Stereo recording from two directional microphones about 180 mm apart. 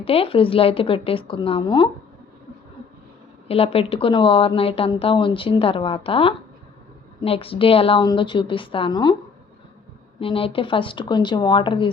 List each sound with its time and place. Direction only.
0.0 s speech: 30° left (ahead or behind)
3.5 s a woman's voice: 30° left (ahead or behind)
10.2 s a woman's voice: 30° left (ahead or behind)